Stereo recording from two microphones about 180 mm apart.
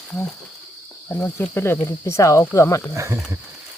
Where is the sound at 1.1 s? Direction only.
10° left (ahead or behind).